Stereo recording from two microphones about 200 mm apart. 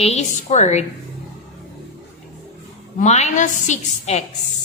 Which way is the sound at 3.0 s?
35° left (ahead or behind).